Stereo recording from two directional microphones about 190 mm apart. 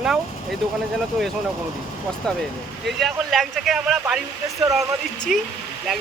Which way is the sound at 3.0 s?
Centre (ahead or behind).